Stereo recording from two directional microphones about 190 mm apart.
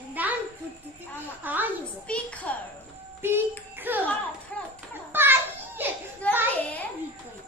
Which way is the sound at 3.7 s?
10° right (ahead or behind).